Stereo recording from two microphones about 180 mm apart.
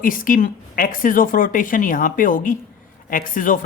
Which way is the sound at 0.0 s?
50° left (ahead or behind).